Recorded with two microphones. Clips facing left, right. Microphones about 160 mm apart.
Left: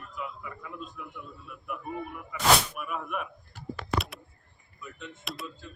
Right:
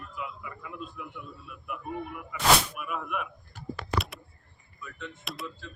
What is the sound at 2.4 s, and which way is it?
Speech, 5° right (ahead or behind).